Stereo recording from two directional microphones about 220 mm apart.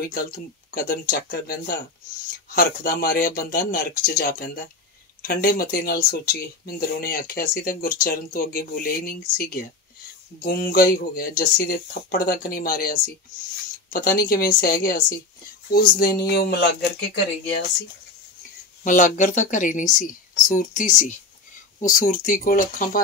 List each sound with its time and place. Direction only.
0.1 s speech: 40° left (ahead or behind)
18.9 s speech: 35° left (ahead or behind)